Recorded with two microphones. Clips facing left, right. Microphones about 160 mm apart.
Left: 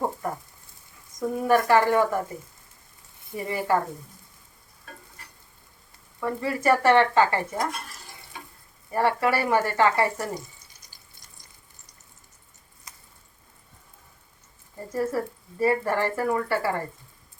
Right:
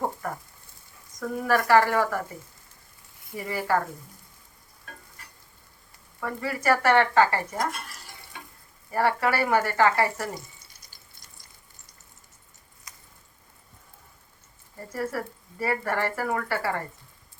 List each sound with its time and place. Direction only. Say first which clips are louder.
1.2 s speech: left 3 dB; 20° left (ahead or behind)
3.3 s speech: left 2 dB; 25° left (ahead or behind)
6.2 s speech: left 2 dB; 25° left (ahead or behind)
8.9 s speech: left 1 dB; 25° left (ahead or behind)
14.9 s speech: left 4 dB; 25° left (ahead or behind)